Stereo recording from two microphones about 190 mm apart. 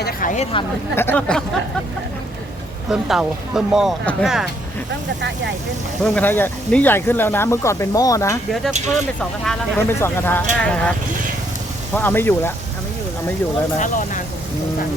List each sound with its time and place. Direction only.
0.0 s a sound: 45° left (ahead or behind)
0.9 s speech: 10° left (ahead or behind)
2.9 s speech: centre (ahead or behind)
6.0 s speech: 5° left (ahead or behind)
8.9 s speech: centre (ahead or behind)
11.9 s speech: 10° left (ahead or behind)
13.7 s speech: 40° left (ahead or behind)